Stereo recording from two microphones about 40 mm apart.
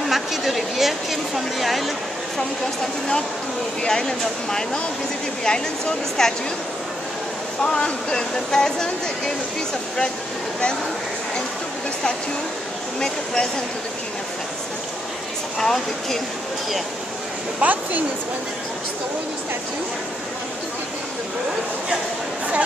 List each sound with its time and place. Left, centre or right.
0.1 s a sound: centre
3.8 s speech: centre
7.6 s speech: centre
13.0 s speech: centre
15.6 s speech: centre
17.6 s a woman's voice: right